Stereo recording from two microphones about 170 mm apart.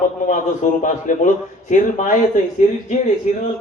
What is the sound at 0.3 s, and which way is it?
Speech, 50° left (ahead or behind).